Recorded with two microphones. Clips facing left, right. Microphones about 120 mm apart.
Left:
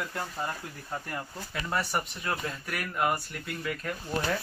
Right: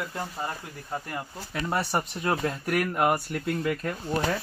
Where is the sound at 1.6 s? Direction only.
30° right (ahead or behind).